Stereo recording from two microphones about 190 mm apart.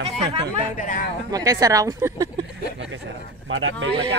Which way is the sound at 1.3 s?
20° right (ahead or behind).